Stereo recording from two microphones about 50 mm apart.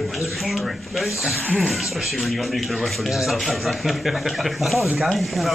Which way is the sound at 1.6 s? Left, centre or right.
Centre.